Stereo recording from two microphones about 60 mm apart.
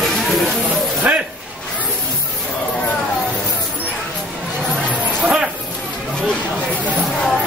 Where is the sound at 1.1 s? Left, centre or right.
Right.